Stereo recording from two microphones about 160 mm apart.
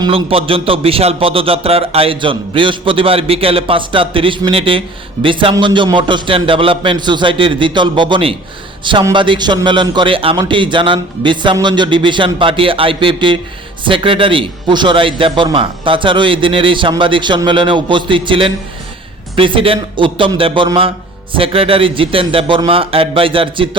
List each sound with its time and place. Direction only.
0.0 s a man's voice: 35° right (ahead or behind)